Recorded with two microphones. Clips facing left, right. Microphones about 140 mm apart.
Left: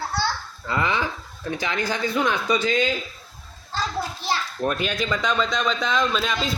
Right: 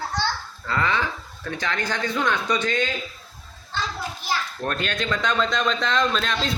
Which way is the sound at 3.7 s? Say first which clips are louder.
Left 2 dB; 40° left (ahead or behind).